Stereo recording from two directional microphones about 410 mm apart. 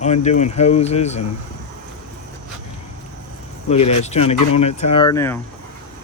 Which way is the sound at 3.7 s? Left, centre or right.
Centre.